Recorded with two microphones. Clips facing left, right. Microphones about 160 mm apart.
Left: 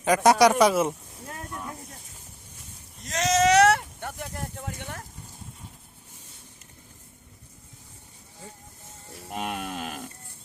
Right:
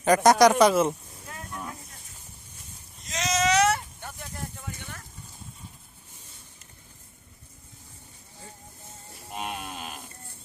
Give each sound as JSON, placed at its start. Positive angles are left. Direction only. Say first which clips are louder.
{"t": 0.0, "sound": "speech", "louder": "right 1 dB", "side_deg": 5}
{"t": 3.1, "sound": "a sound", "louder": "left 4 dB", "side_deg": 60}
{"t": 9.3, "sound": "livestock", "louder": "left 3 dB", "side_deg": 60}